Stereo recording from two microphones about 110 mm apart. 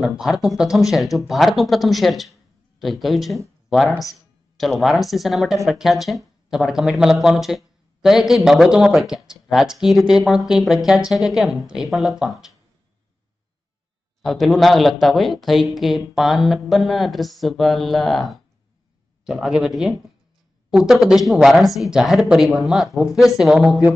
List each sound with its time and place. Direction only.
0.0 s speech: 5° right (ahead or behind)
4.6 s speech: centre (ahead or behind)
14.2 s speech: centre (ahead or behind)